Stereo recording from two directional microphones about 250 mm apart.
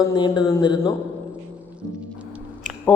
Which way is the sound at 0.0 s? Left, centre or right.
Centre.